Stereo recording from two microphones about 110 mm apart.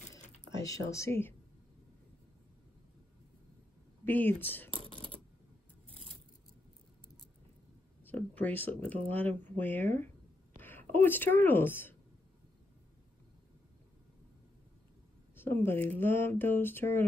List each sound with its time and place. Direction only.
0.8 s speech: 25° left (ahead or behind)
4.0 s speech: 15° left (ahead or behind)
8.0 s a sound: 15° left (ahead or behind)
8.8 s speech: 15° left (ahead or behind)
15.3 s speech: 20° left (ahead or behind)